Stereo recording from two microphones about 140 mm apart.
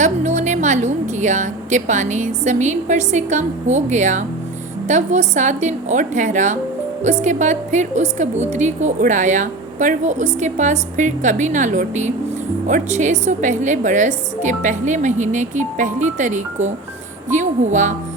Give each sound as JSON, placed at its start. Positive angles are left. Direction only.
{"t": 0.0, "sound": "a woman's voice", "side_deg": -60}